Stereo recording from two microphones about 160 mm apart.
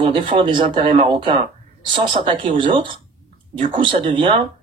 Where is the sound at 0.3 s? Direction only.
40° right (ahead or behind).